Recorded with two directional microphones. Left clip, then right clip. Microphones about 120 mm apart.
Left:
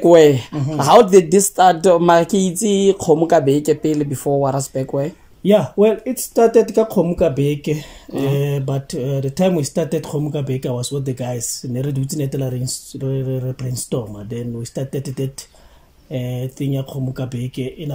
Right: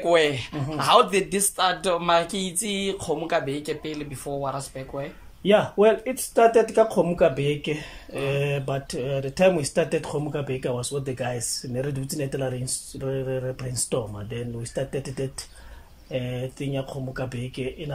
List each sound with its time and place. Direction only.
0.0 s speech: 65° left (ahead or behind); by 5.1 s 90° left
5.4 s speech: 35° left (ahead or behind)